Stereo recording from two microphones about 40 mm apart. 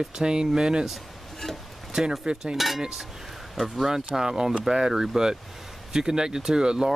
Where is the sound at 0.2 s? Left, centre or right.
Centre.